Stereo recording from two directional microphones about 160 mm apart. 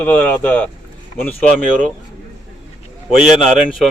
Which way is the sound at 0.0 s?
10° left (ahead or behind).